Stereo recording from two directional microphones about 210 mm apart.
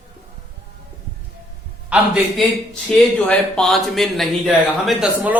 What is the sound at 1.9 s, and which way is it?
A man's voice, 5° right (ahead or behind).